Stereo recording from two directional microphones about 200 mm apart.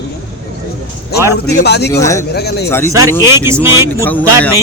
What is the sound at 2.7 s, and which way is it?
Speech, 10° left (ahead or behind).